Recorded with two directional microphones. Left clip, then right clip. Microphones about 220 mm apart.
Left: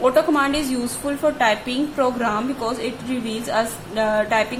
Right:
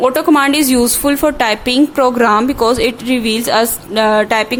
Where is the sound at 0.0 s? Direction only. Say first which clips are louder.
Right 6 dB; 50° right (ahead or behind).